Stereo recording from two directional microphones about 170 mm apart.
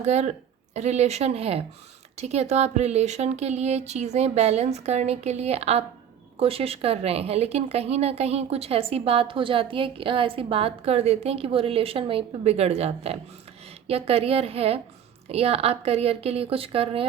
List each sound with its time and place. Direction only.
0.0 s speech: 40° right (ahead or behind)